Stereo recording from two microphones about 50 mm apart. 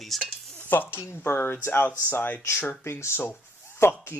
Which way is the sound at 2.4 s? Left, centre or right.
Left.